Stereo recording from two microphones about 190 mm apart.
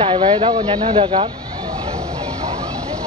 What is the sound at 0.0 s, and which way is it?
Speech, 30° right (ahead or behind).